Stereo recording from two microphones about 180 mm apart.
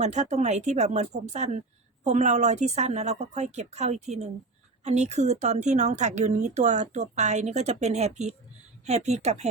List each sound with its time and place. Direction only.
0.0 s a woman's voice: 40° right (ahead or behind)